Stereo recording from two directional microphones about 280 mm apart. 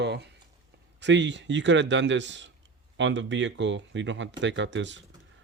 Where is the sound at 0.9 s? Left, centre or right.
Right.